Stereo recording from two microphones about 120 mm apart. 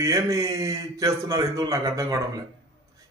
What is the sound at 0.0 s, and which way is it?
A man's voice, 25° right (ahead or behind).